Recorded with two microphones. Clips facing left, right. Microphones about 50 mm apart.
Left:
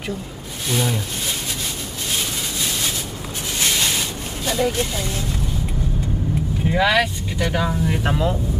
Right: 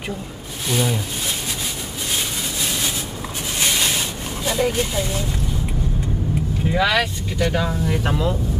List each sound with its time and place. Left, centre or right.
0.7 s speech: centre
4.5 s speech: centre
6.7 s speech: centre